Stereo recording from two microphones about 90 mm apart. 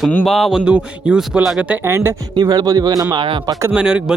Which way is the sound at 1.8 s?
30° right (ahead or behind).